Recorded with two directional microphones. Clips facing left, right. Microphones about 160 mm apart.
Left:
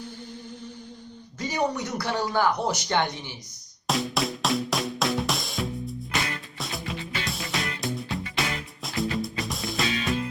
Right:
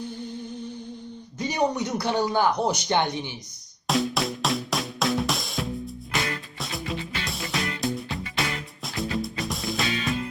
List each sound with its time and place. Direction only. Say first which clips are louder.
1.4 s a man's voice: right 2 dB; 20° right (ahead or behind)
3.8 s music: right 2 dB; centre (ahead or behind)